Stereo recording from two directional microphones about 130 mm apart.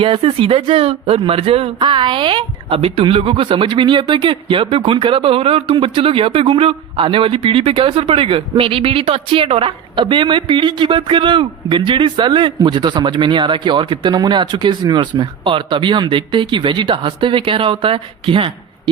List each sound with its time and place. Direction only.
0.0 s a woman's voice: 45° right (ahead or behind)